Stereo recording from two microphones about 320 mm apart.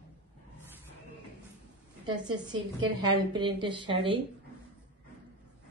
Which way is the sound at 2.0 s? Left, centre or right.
Centre.